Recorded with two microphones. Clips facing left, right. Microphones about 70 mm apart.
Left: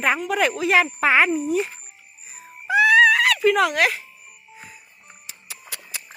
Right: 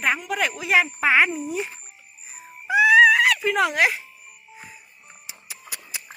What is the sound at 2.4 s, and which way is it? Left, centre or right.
Music, centre.